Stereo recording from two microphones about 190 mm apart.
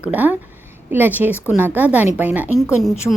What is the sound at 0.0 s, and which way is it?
A woman's voice, 10° right (ahead or behind).